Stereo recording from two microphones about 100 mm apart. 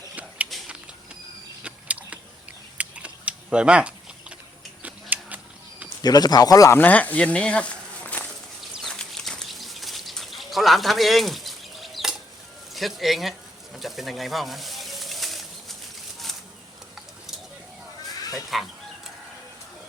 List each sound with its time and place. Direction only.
0.5 s a sound: centre (ahead or behind)
1.6 s a sound: 15° right (ahead or behind)
6.0 s speech: 40° left (ahead or behind)
6.7 s speech: 15° left (ahead or behind)
8.9 s livestock: 5° left (ahead or behind)
12.7 s speech: centre (ahead or behind)
13.7 s bird: centre (ahead or behind)
18.2 s livestock: 35° left (ahead or behind)